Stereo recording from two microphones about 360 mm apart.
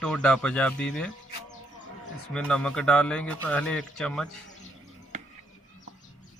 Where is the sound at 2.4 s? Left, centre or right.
Centre.